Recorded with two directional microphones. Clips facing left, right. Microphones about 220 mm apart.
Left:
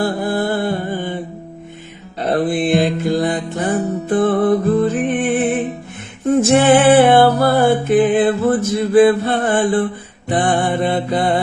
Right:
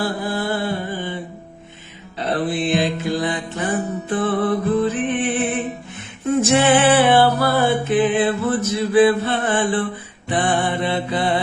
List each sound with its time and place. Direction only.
0.0 s mantra: 50° left (ahead or behind)
2.1 s music: 45° left (ahead or behind)
10.2 s mantra: 45° left (ahead or behind)